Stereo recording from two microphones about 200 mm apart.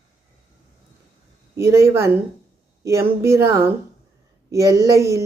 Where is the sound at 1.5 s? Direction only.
15° right (ahead or behind).